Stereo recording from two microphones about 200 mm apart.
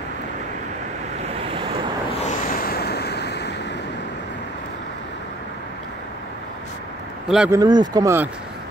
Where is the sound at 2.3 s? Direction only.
45° left (ahead or behind).